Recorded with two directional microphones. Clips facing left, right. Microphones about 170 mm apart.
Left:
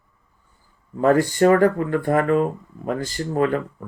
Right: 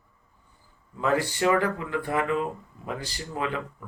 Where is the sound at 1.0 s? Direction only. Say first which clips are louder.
Left 8 dB; 45° left (ahead or behind).